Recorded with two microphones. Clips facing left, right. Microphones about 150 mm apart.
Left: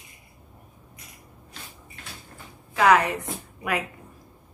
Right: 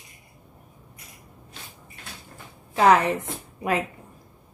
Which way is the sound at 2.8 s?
30° right (ahead or behind).